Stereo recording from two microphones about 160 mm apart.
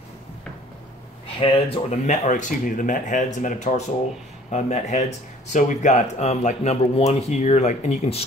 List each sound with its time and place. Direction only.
1.4 s speech: 35° left (ahead or behind)